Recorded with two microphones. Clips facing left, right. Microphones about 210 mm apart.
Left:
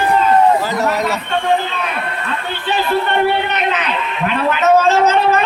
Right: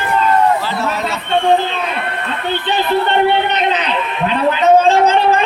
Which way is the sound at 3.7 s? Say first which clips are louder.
Right 2 dB; 30° right (ahead or behind).